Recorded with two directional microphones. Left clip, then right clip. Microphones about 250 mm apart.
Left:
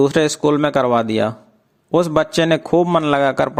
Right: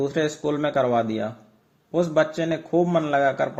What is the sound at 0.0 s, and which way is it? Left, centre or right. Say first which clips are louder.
A man's voice: left 9 dB; left.